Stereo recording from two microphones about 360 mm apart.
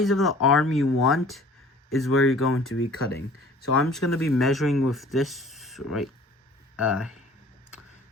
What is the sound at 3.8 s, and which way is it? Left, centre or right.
Speech, centre.